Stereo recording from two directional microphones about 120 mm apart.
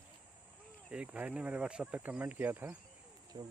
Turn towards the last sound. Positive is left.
turn(degrees=-35)  # may be behind; listen again after turning